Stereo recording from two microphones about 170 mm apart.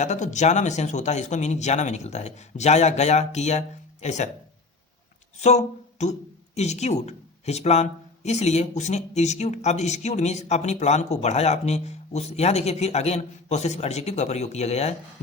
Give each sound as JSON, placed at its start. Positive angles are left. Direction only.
{"t": 0.0, "sound": "speech", "side_deg": 45}
{"t": 5.4, "sound": "speech", "side_deg": 40}